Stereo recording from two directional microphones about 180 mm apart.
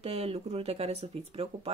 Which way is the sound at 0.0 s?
35° right (ahead or behind).